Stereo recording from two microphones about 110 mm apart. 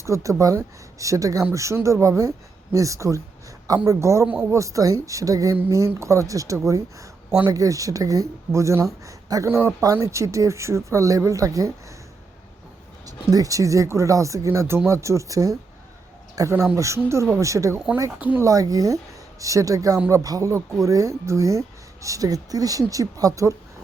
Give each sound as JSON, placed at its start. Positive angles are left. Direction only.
{"t": 0.0, "sound": "speech", "side_deg": -30}
{"t": 9.5, "sound": "speech", "side_deg": -20}
{"t": 13.1, "sound": "speech", "side_deg": -35}
{"t": 18.2, "sound": "speech", "side_deg": -15}
{"t": 18.4, "sound": "speech", "side_deg": -30}